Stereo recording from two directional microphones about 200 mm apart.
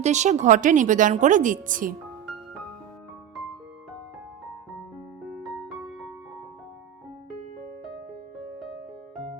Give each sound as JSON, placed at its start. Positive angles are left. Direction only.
{"t": 0.0, "sound": "a woman's voice", "side_deg": -35}
{"t": 5.3, "sound": "music", "side_deg": 0}